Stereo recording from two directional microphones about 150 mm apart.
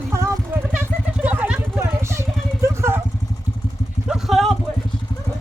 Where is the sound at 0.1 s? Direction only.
20° right (ahead or behind).